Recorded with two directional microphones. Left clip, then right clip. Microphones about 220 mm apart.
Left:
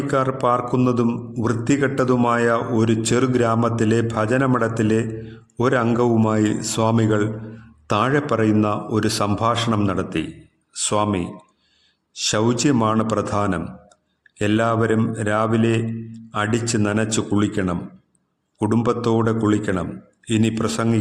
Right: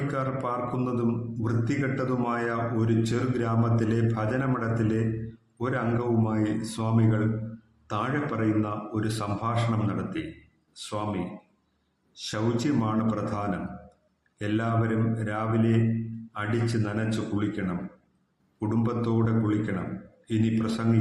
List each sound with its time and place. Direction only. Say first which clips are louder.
0.1 s a man's voice: left 13 dB; 45° left (ahead or behind)
12.2 s a man's voice: left 9 dB; 45° left (ahead or behind)